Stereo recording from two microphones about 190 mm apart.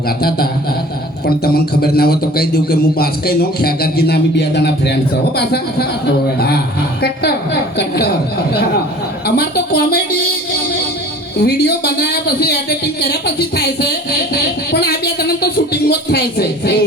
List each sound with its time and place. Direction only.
0.2 s a sound: 55° left (ahead or behind)
1.5 s a man's voice: 55° left (ahead or behind)
7.0 s a man's voice: 60° left (ahead or behind)
9.2 s a man's voice: 55° left (ahead or behind)
11.3 s a man's voice: 55° left (ahead or behind)